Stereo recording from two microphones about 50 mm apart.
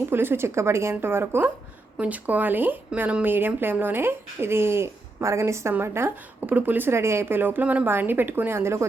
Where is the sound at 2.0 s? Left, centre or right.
Right.